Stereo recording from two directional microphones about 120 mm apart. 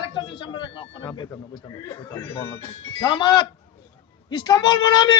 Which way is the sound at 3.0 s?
40° left (ahead or behind).